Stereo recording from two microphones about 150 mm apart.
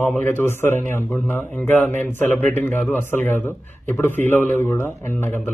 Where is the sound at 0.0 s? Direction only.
10° left (ahead or behind).